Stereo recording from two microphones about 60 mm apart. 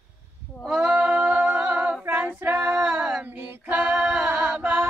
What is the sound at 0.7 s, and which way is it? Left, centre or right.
Female singing, centre.